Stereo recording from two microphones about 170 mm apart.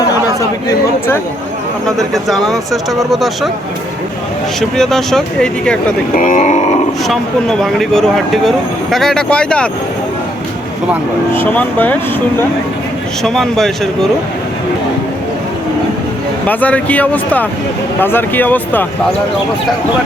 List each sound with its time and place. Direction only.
2.0 s speech: centre (ahead or behind)
4.8 s speech: centre (ahead or behind)
6.1 s speech: 50° left (ahead or behind)
7.1 s speech: centre (ahead or behind)
11.3 s speech: 10° left (ahead or behind)
13.2 s speech: centre (ahead or behind)
16.5 s speech: 10° left (ahead or behind)